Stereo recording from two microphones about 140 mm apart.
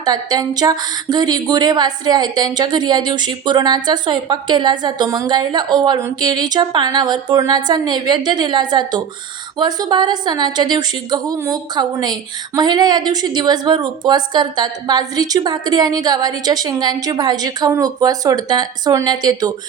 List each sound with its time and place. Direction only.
0.0 s a woman's voice: 30° right (ahead or behind)